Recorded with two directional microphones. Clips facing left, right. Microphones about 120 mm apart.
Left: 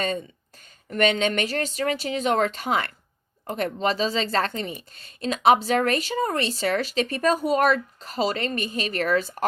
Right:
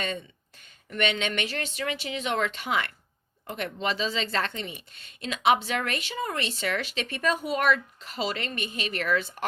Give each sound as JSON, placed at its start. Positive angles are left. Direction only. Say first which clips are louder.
{"t": 0.9, "sound": "speech", "louder": "left 6 dB", "side_deg": 40}